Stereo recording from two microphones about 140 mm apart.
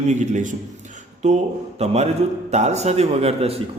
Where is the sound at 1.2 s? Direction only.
50° right (ahead or behind).